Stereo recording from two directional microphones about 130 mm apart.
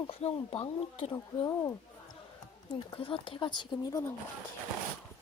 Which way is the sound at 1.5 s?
25° left (ahead or behind).